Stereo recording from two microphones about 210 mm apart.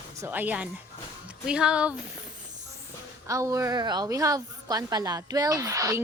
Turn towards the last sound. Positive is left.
turn(degrees=-15)  # may be behind; listen again after turning